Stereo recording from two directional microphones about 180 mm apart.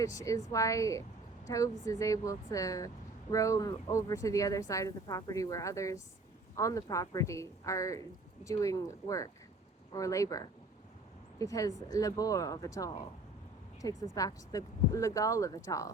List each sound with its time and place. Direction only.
0.0 s speech: 20° left (ahead or behind)